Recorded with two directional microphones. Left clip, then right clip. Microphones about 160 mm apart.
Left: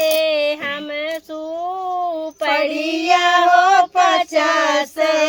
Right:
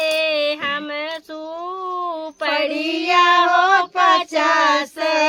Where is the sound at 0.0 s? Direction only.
35° right (ahead or behind).